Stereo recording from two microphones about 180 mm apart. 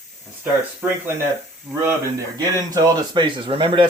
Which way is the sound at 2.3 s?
20° right (ahead or behind).